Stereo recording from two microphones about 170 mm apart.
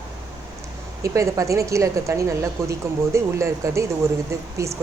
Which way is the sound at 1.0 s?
20° right (ahead or behind).